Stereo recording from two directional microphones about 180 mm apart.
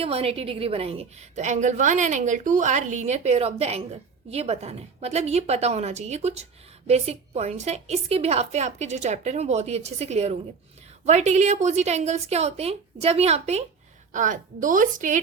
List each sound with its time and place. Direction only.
0.0 s a woman's voice: 35° right (ahead or behind)